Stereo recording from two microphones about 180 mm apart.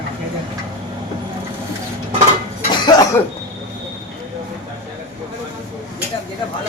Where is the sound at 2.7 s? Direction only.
20° left (ahead or behind).